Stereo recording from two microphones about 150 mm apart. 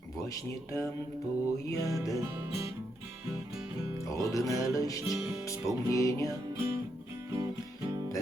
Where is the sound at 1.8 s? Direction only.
20° left (ahead or behind).